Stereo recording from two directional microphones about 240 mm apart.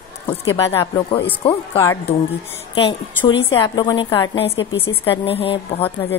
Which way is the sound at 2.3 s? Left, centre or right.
Left.